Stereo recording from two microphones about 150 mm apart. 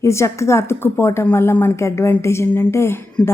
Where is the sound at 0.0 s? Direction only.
20° left (ahead or behind).